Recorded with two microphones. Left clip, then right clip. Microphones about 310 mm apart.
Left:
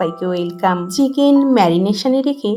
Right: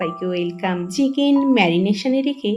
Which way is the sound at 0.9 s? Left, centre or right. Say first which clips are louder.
Left 2 dB; centre.